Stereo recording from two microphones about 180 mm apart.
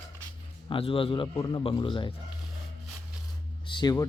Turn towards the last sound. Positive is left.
turn(degrees=20)  # may be behind; listen again after turning